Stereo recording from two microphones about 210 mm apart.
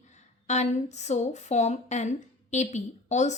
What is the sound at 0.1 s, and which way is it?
Speech, 35° left (ahead or behind).